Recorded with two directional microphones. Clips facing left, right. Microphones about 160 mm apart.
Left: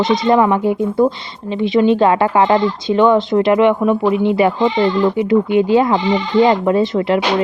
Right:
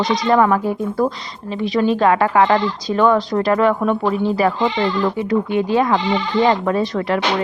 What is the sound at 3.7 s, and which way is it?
Speech, 10° left (ahead or behind).